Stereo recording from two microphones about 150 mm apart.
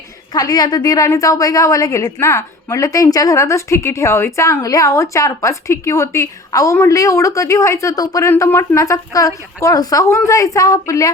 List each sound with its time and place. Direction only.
0.3 s a woman's voice: 25° left (ahead or behind)